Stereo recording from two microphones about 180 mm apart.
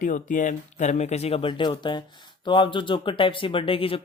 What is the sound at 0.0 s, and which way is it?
Speech, 45° left (ahead or behind).